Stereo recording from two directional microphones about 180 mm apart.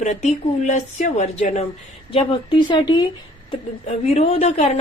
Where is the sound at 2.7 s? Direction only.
25° left (ahead or behind).